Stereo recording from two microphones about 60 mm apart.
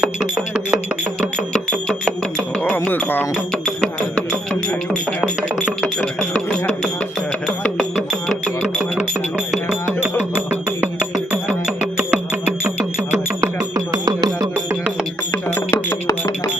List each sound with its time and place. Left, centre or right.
0.0 s a sound: centre
1.5 s a sound: centre
2.9 s music: left
6.5 s music: centre
10.0 s music: right
11.3 s music: centre
13.9 s music: right
15.7 s music: left